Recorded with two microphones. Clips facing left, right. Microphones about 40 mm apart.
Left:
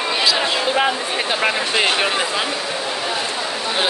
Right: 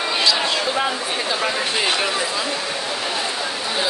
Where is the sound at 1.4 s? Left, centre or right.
Left.